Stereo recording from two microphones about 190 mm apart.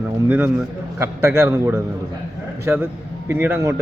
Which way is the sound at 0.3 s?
10° right (ahead or behind).